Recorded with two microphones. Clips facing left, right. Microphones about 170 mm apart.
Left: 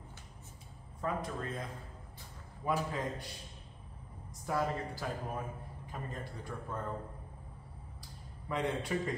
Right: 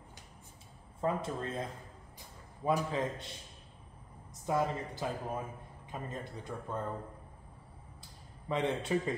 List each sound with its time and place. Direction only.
1.0 s speech: 25° right (ahead or behind)
2.6 s speech: 20° right (ahead or behind)
4.5 s speech: 20° right (ahead or behind)
8.5 s speech: 25° right (ahead or behind)